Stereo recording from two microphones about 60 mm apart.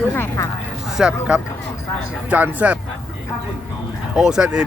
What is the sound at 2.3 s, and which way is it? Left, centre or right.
Speech, right.